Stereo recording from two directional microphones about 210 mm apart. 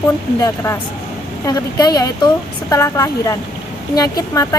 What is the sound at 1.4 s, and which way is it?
Speech, 20° left (ahead or behind).